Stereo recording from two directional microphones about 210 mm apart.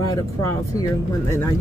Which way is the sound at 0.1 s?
15° left (ahead or behind).